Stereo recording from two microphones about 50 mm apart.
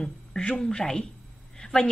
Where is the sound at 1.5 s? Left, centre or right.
Centre.